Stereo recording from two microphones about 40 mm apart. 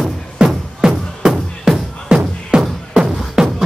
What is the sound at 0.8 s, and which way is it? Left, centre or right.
Music, centre.